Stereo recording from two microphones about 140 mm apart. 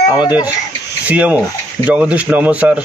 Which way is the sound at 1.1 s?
10° right (ahead or behind).